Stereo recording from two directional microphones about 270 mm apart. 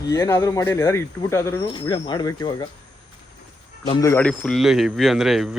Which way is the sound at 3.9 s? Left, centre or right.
Centre.